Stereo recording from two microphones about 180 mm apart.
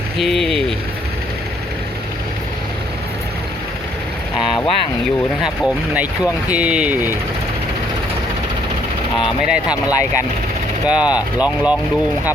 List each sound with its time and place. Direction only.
0.2 s speech: centre (ahead or behind)
5.4 s speech: 5° right (ahead or behind)
9.2 s speech: 5° right (ahead or behind)
9.9 s speech: 15° left (ahead or behind)
10.8 s speech: 5° right (ahead or behind)